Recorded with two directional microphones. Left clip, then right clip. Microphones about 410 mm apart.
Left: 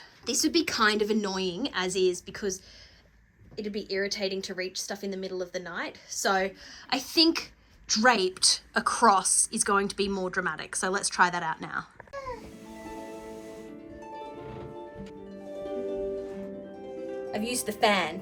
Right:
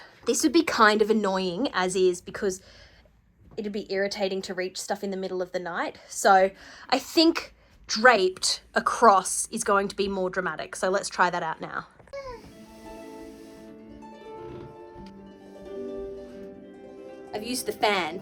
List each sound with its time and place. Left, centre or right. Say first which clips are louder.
0.3 s speech: right 4 dB; centre
17.3 s a woman's voice: right 3 dB; centre